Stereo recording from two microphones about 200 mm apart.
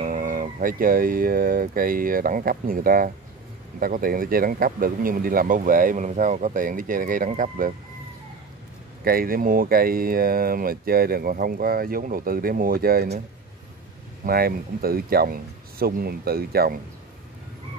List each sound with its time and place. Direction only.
0.0 s speech: 45° right (ahead or behind)
9.0 s speech: 45° right (ahead or behind)
14.2 s speech: 50° right (ahead or behind)